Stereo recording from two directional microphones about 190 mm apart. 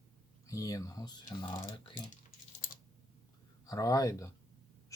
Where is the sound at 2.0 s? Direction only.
40° left (ahead or behind).